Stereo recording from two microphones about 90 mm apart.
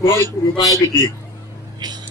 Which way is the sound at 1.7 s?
50° right (ahead or behind).